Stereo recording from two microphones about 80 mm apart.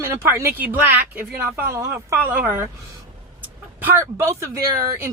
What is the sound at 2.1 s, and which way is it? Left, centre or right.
Speech, right.